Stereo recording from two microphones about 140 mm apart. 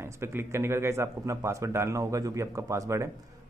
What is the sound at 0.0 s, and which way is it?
A man's voice, 15° right (ahead or behind).